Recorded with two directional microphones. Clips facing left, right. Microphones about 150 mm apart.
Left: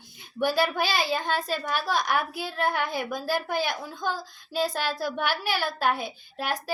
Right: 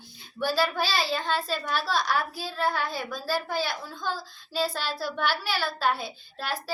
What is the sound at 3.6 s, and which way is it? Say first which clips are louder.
Speech: left 2 dB; 55° left (ahead or behind).